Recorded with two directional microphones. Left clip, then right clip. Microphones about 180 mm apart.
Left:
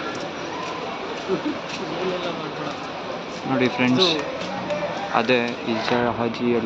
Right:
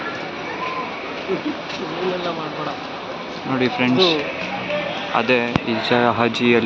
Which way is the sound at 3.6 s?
5° left (ahead or behind).